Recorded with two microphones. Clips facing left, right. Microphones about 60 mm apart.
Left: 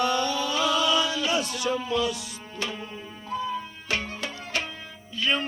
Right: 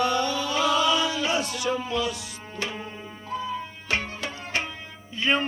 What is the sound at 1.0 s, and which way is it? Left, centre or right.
Chant, right.